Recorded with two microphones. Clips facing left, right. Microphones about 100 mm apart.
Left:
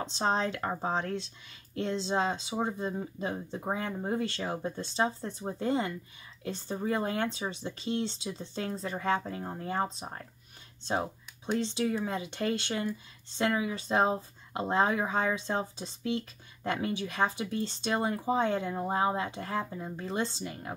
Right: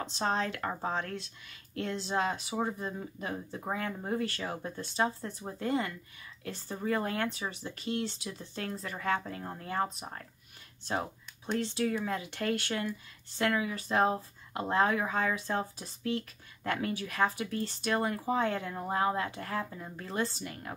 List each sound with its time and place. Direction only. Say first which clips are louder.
0.1 s speech: left 2 dB; 25° left (ahead or behind)